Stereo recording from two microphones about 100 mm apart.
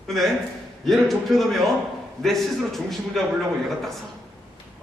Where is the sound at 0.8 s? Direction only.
Centre (ahead or behind).